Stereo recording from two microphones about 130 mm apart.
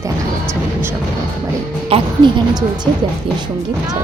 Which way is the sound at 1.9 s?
45° right (ahead or behind).